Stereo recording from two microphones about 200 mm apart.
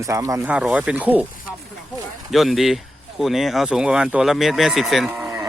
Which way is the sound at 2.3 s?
Centre (ahead or behind).